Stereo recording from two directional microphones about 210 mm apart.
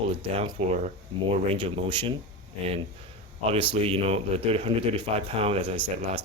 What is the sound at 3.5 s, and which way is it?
Speech, 25° right (ahead or behind).